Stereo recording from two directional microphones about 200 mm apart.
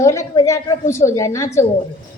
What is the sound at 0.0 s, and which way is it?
A woman's voice, 15° left (ahead or behind).